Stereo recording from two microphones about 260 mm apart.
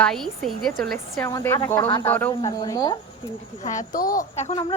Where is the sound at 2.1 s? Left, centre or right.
Centre.